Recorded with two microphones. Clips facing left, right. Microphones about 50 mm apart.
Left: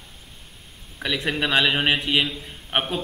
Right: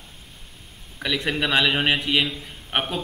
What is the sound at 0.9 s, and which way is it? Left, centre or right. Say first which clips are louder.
A man's voice: even; centre.